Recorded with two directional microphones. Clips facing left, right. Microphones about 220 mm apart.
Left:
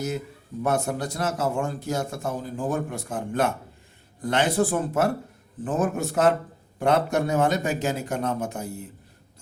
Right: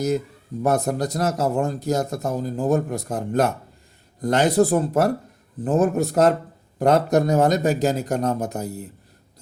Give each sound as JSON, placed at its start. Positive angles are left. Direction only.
{"t": 0.6, "sound": "speech", "side_deg": -40}